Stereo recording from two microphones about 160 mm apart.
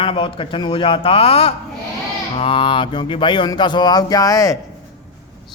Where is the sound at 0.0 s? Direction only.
35° left (ahead or behind).